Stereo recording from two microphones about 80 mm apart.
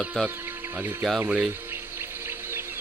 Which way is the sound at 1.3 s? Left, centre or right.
Centre.